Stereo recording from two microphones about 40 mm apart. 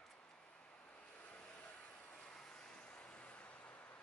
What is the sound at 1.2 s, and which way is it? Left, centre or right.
Vehicle, left.